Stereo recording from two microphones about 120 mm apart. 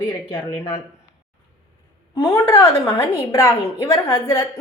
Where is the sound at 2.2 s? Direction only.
25° left (ahead or behind).